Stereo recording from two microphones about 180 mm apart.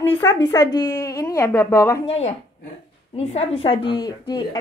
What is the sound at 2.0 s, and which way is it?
Speech, 35° left (ahead or behind).